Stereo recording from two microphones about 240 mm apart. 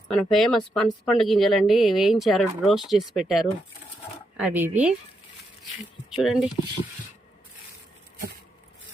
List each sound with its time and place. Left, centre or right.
0.1 s a woman's voice: centre
6.1 s a woman's voice: centre